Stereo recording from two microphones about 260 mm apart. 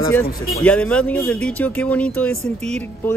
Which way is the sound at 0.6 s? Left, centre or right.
Centre.